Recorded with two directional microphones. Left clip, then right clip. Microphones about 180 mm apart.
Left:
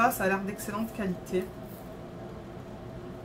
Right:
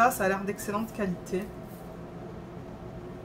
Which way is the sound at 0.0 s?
20° right (ahead or behind).